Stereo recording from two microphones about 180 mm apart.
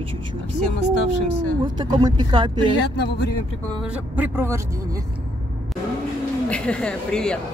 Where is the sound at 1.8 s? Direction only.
25° right (ahead or behind).